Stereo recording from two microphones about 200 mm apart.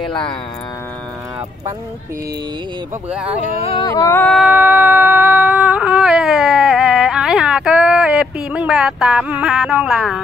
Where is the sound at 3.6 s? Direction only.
25° left (ahead or behind); by 4.4 s 10° left (ahead or behind).